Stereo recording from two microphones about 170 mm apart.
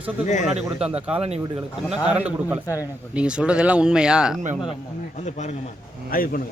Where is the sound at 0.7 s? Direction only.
5° right (ahead or behind).